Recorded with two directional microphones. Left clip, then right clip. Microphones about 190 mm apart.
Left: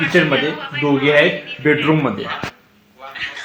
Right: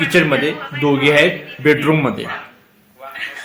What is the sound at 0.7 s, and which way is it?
Speech, 20° right (ahead or behind).